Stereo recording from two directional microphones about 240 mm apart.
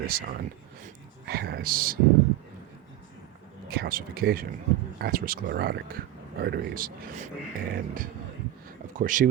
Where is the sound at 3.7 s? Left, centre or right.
Right.